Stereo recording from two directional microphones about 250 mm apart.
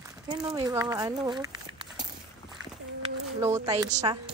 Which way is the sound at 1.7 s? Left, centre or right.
Centre.